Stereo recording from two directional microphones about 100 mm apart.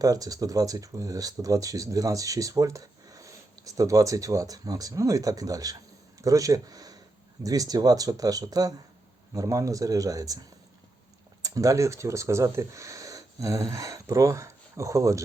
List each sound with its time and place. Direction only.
0.0 s speech: 35° right (ahead or behind)
11.4 s speech: 35° right (ahead or behind)